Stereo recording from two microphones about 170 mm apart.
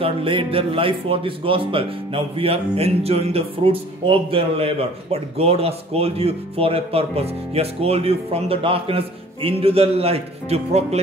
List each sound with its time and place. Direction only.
0.0 s speech: 30° right (ahead or behind)